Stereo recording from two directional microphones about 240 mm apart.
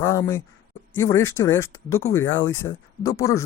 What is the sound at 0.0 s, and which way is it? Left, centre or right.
Speech, centre.